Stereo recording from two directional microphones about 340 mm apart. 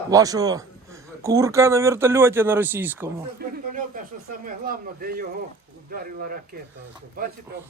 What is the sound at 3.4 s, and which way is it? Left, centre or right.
Speech, right.